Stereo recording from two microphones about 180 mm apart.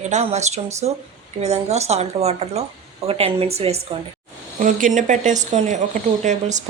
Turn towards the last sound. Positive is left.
turn(degrees=-40)  # may be behind; listen again after turning